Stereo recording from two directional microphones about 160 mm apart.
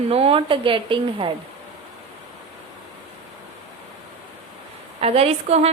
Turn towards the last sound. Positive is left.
turn(degrees=-40)  # may be behind; listen again after turning